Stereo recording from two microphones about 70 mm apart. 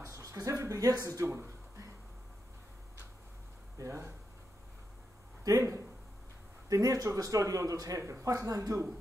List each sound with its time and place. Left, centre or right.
0.0 s a sound: right
1.0 s speech: right
3.7 s speech: right
5.4 s speech: right